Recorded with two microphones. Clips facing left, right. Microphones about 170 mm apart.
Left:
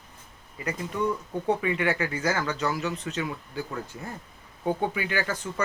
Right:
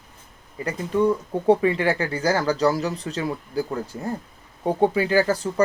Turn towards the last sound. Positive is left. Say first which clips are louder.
# right 9 dB
turn(degrees=-35)  # may be behind; listen again after turning